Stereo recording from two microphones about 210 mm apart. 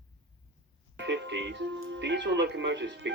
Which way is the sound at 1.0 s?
60° right (ahead or behind).